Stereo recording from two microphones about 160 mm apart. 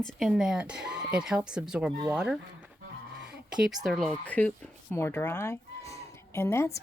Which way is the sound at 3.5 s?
5° right (ahead or behind).